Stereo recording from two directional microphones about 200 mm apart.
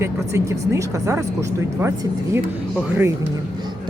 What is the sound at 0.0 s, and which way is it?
Speech, 15° right (ahead or behind).